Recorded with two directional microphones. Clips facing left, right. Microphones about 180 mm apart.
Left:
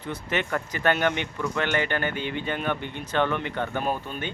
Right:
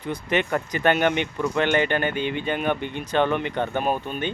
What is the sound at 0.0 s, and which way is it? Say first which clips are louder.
Speech: right 4 dB; 15° right (ahead or behind).